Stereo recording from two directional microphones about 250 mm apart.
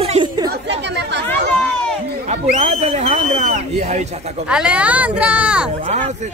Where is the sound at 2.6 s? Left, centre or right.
Right.